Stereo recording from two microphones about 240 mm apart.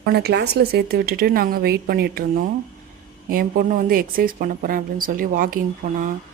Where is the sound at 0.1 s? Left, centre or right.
Right.